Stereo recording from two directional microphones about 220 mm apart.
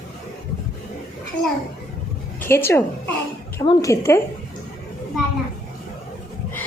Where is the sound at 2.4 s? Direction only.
10° left (ahead or behind).